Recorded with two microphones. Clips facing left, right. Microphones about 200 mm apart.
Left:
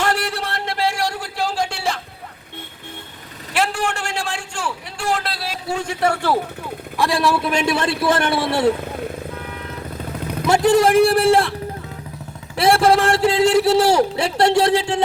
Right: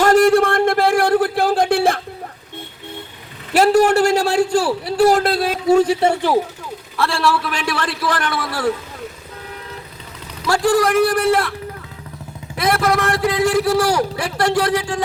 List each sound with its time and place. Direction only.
0.0 s a sound: 45° right (ahead or behind)
3.5 s a man's voice: 40° right (ahead or behind)
6.9 s a man's voice: 15° left (ahead or behind)
10.4 s a man's voice: 20° left (ahead or behind)
12.5 s a man's voice: 30° left (ahead or behind)